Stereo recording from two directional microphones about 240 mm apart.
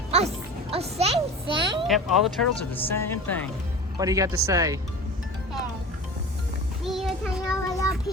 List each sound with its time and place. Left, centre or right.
0.7 s a sound: right
1.9 s speech: centre
3.9 s speech: centre
6.8 s child singing: centre
7.7 s child singing: centre